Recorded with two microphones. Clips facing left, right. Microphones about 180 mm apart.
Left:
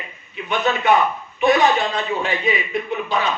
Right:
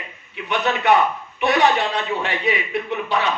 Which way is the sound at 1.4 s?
70° right (ahead or behind).